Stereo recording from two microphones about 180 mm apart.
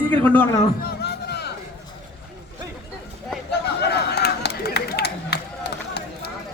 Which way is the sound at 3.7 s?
65° left (ahead or behind).